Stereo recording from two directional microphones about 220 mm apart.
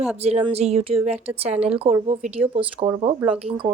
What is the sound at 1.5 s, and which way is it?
Speech, 5° right (ahead or behind).